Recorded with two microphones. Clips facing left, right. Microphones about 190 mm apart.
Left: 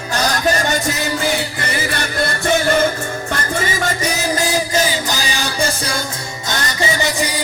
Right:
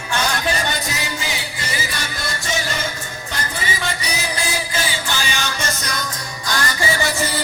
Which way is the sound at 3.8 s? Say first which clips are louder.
Left 6 dB; 45° left (ahead or behind).